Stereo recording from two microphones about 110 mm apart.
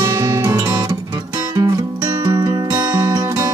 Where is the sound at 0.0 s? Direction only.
30° right (ahead or behind).